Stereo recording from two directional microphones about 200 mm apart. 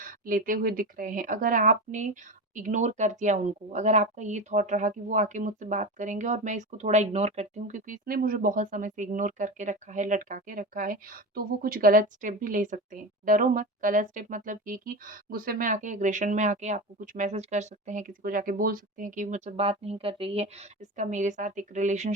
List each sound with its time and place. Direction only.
0.0 s a woman's voice: 45° right (ahead or behind)